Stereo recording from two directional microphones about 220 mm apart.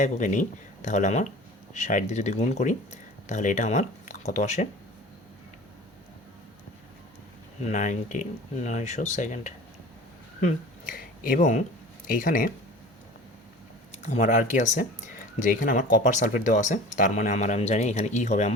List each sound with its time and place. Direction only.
0.0 s speech: 35° left (ahead or behind)
7.6 s speech: 35° left (ahead or behind)
13.9 s speech: 30° left (ahead or behind)